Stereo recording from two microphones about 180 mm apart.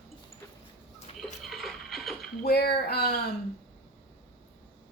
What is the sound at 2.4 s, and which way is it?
Speech, 60° left (ahead or behind).